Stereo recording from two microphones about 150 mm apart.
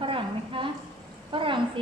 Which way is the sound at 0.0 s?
35° right (ahead or behind).